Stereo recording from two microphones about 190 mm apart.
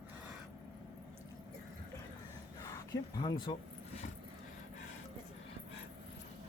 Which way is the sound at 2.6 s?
20° left (ahead or behind).